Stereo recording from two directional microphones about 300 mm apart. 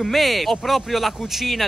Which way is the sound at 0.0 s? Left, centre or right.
Centre.